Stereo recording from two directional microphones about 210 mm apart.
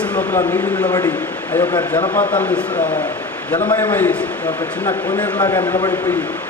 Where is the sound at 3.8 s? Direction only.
10° left (ahead or behind).